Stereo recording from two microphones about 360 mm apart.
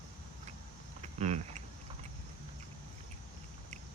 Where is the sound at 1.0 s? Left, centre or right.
Centre.